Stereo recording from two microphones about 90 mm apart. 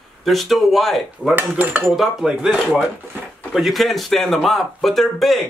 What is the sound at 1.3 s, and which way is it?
Dishes, 20° right (ahead or behind).